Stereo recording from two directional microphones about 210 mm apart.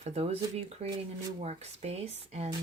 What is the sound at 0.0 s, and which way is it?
Speech, 30° right (ahead or behind).